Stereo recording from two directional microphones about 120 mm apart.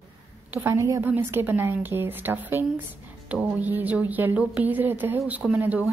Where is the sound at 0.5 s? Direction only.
20° right (ahead or behind).